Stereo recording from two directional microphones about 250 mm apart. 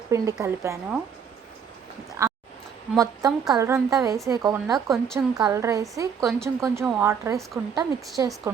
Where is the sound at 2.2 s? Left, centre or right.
Centre.